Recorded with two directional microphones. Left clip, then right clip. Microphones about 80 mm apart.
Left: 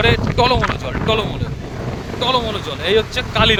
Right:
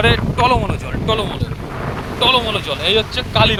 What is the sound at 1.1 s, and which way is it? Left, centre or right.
Speech, left.